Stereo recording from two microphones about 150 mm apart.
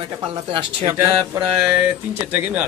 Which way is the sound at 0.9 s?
25° right (ahead or behind).